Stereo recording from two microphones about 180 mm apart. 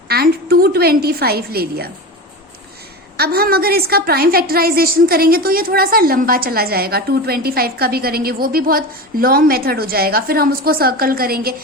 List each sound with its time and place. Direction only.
0.1 s a woman's voice: 60° right (ahead or behind)
3.2 s a woman's voice: 60° right (ahead or behind)